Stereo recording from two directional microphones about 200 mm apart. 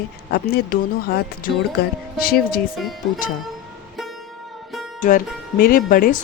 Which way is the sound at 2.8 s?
Centre (ahead or behind).